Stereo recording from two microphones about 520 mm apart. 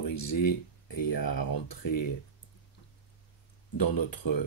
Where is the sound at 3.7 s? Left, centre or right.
Left.